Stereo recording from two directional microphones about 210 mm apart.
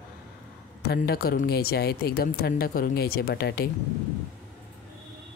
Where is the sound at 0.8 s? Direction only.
50° left (ahead or behind).